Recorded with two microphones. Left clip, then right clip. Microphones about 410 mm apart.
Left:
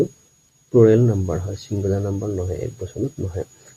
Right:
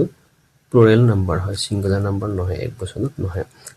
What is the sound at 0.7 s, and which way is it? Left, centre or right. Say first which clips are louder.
Speech: right 1 dB; left.